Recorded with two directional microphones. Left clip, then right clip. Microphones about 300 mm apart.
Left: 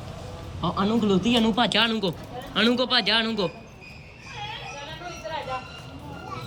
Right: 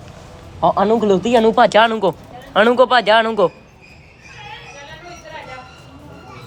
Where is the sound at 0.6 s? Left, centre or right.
Right.